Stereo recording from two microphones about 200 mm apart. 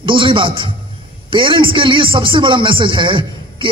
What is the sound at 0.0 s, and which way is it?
A man's voice, 25° right (ahead or behind).